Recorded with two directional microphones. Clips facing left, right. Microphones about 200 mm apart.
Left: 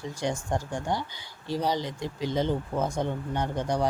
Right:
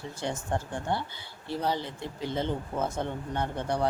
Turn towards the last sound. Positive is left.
turn(degrees=15)  # may be behind; listen again after turning